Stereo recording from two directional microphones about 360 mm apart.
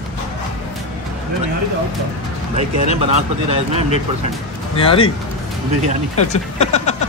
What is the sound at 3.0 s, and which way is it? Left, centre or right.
Speech, centre.